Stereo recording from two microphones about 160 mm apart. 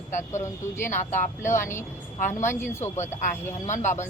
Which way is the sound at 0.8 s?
15° left (ahead or behind).